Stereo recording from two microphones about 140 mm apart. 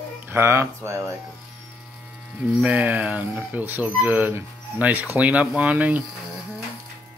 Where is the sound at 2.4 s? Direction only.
10° right (ahead or behind).